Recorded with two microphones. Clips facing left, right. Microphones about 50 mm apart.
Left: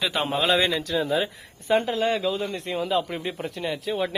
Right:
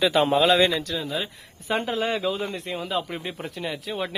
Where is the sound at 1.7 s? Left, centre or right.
Centre.